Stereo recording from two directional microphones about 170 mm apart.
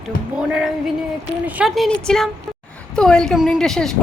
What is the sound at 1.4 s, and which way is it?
A woman's voice, 5° right (ahead or behind).